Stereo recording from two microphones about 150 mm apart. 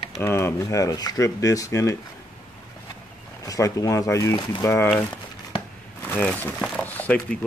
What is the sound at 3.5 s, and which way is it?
Speech, 20° left (ahead or behind).